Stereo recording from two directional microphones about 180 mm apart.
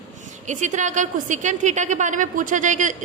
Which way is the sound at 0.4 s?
40° right (ahead or behind).